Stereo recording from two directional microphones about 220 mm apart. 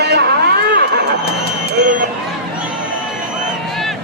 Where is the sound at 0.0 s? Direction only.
50° right (ahead or behind).